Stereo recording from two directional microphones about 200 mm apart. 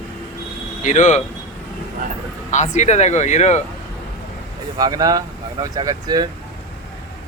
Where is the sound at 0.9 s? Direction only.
35° left (ahead or behind).